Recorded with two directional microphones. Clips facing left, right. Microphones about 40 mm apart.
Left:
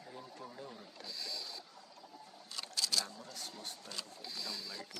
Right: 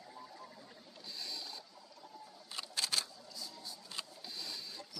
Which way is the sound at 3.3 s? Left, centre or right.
Left.